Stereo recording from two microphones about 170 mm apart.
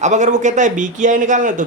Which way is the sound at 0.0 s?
45° right (ahead or behind).